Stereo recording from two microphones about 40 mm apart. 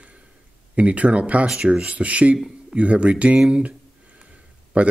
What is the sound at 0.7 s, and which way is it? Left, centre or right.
Speech, right.